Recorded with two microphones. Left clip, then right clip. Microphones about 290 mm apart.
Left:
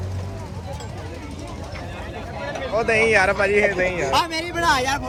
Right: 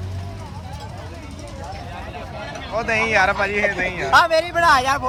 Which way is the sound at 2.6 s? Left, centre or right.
Centre.